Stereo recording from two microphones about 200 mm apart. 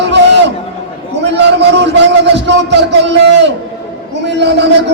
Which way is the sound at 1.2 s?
60° right (ahead or behind).